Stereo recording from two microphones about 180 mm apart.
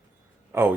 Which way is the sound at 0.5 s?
15° right (ahead or behind).